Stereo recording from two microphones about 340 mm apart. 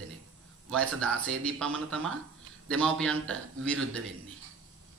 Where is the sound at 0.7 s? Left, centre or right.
Centre.